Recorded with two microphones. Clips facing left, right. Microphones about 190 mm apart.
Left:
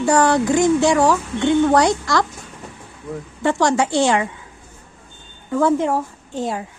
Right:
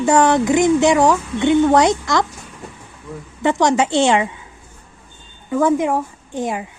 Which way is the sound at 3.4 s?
20° right (ahead or behind).